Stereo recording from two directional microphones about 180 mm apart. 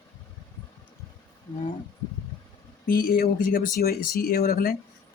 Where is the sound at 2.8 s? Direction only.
55° left (ahead or behind).